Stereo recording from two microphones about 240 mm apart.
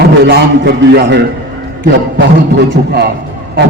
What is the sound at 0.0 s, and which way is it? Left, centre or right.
A man's voice, right.